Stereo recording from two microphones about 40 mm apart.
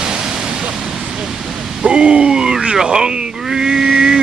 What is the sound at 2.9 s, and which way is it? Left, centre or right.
Vehicle, centre.